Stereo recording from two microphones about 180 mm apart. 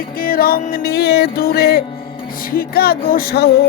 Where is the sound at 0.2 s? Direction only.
55° left (ahead or behind).